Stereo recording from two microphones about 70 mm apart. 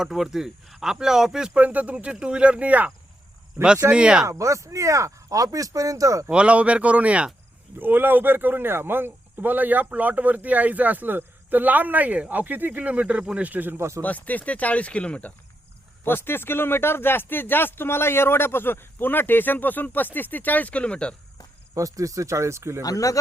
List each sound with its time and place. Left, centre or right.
0.0 s speech: centre; by 2.9 s right
3.9 s speech: centre
4.3 s speech: right
6.3 s speech: centre
7.8 s speech: right
14.0 s speech: left
16.0 s speech: left; by 21.2 s centre
21.8 s speech: right
22.8 s speech: left